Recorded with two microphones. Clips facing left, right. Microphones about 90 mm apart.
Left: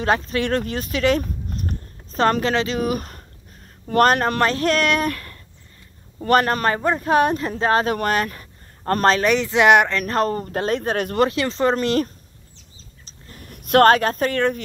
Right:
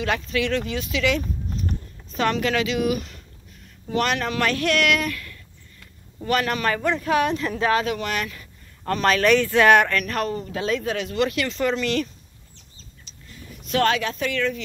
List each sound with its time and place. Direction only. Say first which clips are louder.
0.0 s speech: left 3 dB; 40° left (ahead or behind)
9.2 s speech: even; 20° left (ahead or behind)
10.0 s speech: left 5 dB; 35° left (ahead or behind)
11.2 s speech: left 4 dB; 30° left (ahead or behind)
13.5 s speech: left 8 dB; 55° left (ahead or behind)